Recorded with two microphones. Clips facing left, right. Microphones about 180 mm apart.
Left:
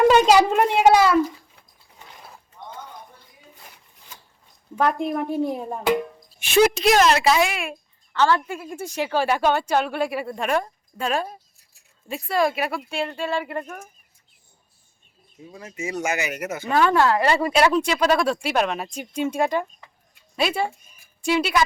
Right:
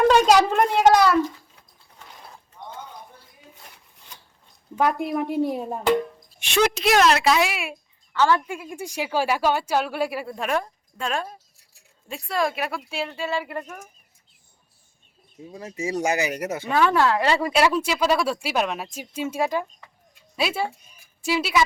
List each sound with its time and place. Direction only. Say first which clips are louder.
0.1 s a sound: left 1 dB; 10° left (ahead or behind)
0.5 s a child's voice: left 1 dB; 10° left (ahead or behind)
2.0 s pulleys: even; centre (ahead or behind)
4.8 s speech: even; 10° right (ahead or behind)
6.1 s speech: left 4 dB; 5° left (ahead or behind)
15.5 s speech: right 2 dB; 35° right (ahead or behind)
16.6 s speech: left 2 dB; 5° right (ahead or behind)